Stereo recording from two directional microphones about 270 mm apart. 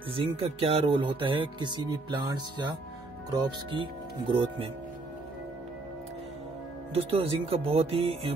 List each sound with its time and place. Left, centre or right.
0.1 s speech: right
6.9 s speech: right